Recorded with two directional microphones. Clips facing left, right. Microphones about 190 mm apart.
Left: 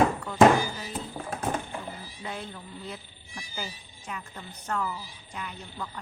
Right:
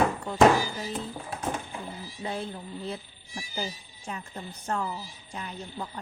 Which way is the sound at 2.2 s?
30° right (ahead or behind).